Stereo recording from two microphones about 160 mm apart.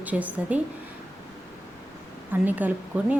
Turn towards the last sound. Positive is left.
turn(degrees=-10)  # may be behind; listen again after turning